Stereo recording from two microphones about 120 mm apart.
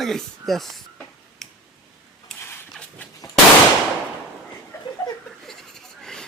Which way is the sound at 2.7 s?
10° left (ahead or behind).